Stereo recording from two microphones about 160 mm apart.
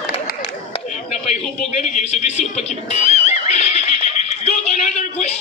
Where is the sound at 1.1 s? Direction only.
45° left (ahead or behind).